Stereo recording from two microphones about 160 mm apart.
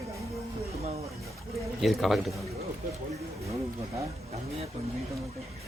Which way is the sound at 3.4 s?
20° right (ahead or behind).